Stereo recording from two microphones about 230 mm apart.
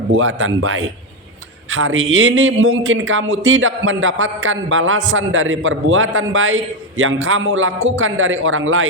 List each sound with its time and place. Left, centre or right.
0.1 s a man's voice: right